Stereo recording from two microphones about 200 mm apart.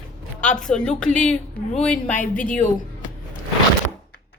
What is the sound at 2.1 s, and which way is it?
Speech, 40° left (ahead or behind).